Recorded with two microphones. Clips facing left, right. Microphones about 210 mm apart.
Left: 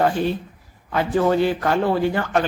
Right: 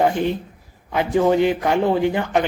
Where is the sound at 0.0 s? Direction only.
15° right (ahead or behind).